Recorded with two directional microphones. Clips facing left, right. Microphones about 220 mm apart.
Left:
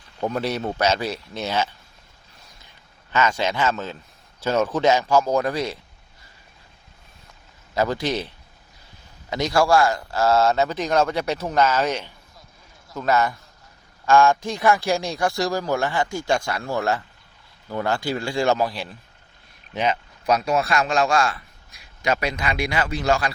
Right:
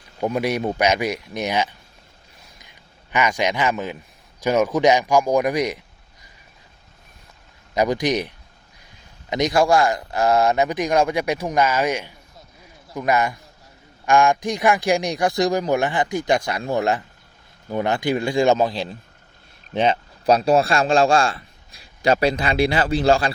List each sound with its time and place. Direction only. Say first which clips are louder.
0.2 s a man's voice: right 3 dB; 10° right (ahead or behind)
7.7 s a man's voice: right 3 dB; 15° right (ahead or behind)
9.3 s a man's voice: right 1 dB; 20° right (ahead or behind)